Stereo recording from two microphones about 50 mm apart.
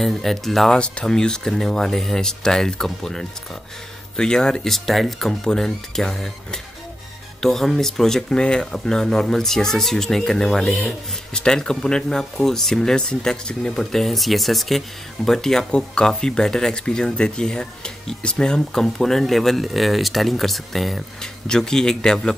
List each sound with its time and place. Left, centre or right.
0.0 s speech: centre
0.7 s speech: left; by 5.3 s centre
5.4 s speech: centre